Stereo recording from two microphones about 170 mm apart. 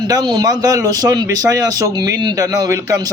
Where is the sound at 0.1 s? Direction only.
25° right (ahead or behind).